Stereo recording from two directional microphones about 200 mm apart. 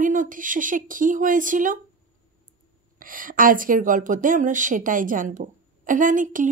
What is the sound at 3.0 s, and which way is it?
A woman's voice, 45° right (ahead or behind).